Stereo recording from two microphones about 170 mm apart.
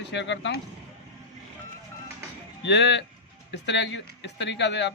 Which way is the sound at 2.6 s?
90° left.